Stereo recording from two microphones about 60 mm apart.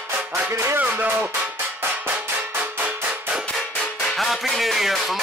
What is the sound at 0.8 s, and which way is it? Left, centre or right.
Music, right.